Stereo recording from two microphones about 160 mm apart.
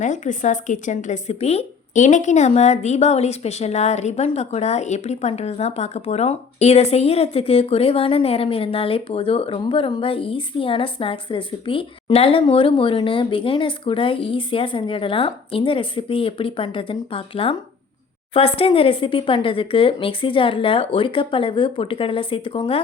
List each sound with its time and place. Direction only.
0.0 s a woman's voice: 50° left (ahead or behind); by 22.8 s 35° left (ahead or behind)